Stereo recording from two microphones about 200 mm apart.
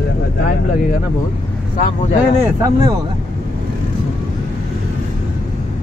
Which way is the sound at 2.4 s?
15° right (ahead or behind).